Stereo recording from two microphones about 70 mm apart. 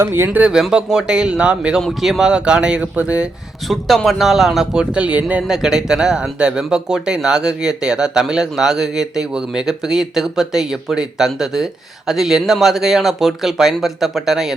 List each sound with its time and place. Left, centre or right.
0.0 s speech: right
0.3 s speech: centre
3.7 s speech: centre
5.4 s speech: centre